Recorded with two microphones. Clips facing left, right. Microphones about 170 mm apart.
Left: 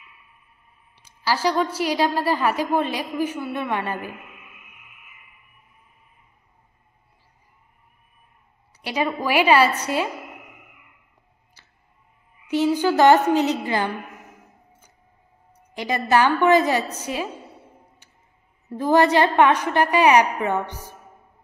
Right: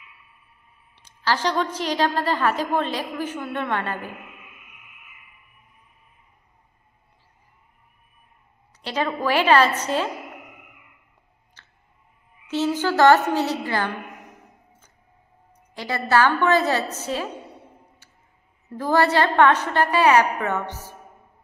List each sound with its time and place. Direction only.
0.9 s a woman's voice: 10° left (ahead or behind)
8.8 s a woman's voice: 10° left (ahead or behind)
11.6 s clicking: 10° left (ahead or behind)
12.4 s a woman's voice: 15° left (ahead or behind)
15.7 s a woman's voice: 15° left (ahead or behind)
18.7 s a woman's voice: 15° left (ahead or behind)